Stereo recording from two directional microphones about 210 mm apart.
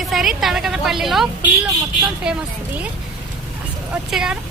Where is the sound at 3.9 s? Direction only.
5° right (ahead or behind).